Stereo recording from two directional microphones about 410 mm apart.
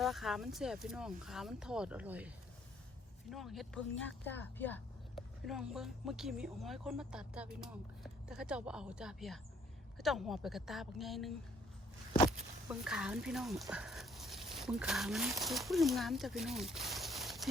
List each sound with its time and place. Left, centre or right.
0.0 s speech: centre
12.8 s speech: centre